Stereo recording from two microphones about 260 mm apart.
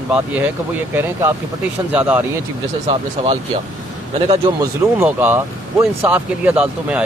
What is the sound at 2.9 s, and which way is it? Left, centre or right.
Speech, right.